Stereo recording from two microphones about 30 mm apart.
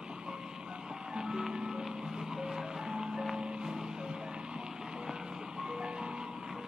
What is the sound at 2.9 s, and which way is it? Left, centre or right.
Music, right.